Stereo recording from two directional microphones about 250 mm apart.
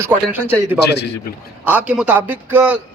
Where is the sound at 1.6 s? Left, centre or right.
Centre.